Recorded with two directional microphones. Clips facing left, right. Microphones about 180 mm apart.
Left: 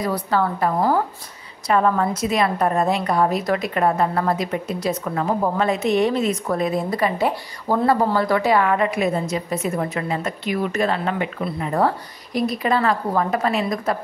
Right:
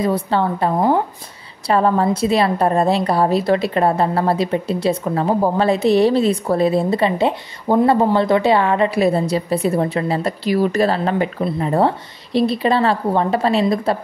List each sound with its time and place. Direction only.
0.0 s a woman's voice: 25° right (ahead or behind)